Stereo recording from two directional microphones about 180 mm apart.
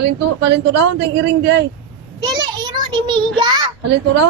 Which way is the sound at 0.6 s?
70° right (ahead or behind).